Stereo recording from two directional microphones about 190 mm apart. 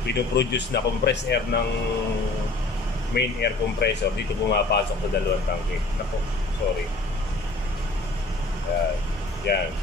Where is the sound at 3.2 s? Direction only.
60° left (ahead or behind).